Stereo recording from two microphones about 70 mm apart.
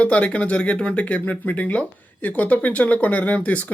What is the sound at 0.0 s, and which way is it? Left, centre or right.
Speech, centre.